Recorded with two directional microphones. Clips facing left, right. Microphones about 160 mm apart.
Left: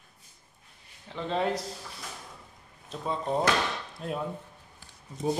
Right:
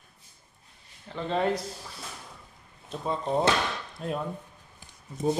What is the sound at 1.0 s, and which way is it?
Speech, centre (ahead or behind).